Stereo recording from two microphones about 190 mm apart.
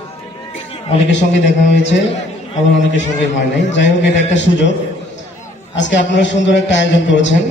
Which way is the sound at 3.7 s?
70° left (ahead or behind).